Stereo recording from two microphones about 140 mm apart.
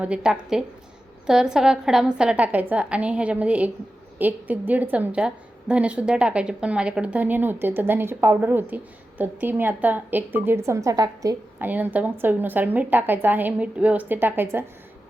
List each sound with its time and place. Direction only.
0.0 s a woman's voice: 5° right (ahead or behind); by 11.3 s 25° right (ahead or behind)
11.6 s a woman's voice: 10° right (ahead or behind)